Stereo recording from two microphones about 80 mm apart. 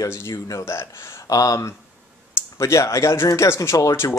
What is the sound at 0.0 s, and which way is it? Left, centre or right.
Speech, left.